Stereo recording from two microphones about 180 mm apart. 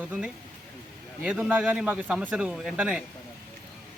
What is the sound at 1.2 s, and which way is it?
A man's voice, 5° right (ahead or behind).